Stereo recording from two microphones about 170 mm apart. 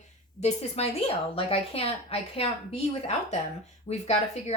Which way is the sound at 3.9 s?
40° left (ahead or behind).